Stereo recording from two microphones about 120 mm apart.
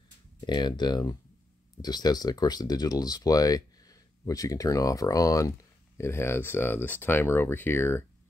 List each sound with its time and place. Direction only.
0.5 s speech: 35° left (ahead or behind); by 8.0 s 20° left (ahead or behind)